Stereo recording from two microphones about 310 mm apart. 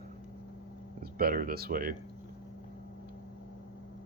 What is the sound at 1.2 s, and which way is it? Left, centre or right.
Speech, right.